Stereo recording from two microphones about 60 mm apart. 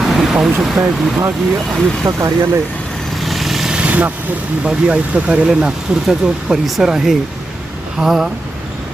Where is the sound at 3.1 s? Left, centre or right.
Centre.